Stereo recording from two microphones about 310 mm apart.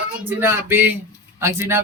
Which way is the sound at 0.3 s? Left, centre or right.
Centre.